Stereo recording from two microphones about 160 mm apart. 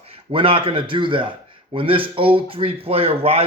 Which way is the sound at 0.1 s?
35° right (ahead or behind).